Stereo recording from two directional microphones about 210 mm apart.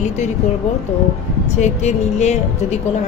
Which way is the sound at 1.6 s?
35° left (ahead or behind).